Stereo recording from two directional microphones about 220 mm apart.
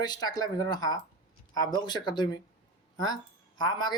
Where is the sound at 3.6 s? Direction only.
20° left (ahead or behind).